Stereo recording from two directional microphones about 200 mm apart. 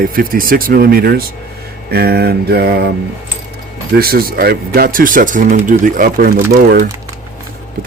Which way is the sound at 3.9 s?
50° right (ahead or behind).